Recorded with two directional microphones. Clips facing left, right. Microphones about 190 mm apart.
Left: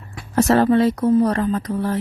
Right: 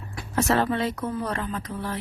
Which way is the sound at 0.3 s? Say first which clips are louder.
Left 8 dB; 40° left (ahead or behind).